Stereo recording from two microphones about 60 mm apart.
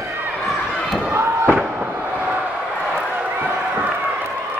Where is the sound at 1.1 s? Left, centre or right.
Right.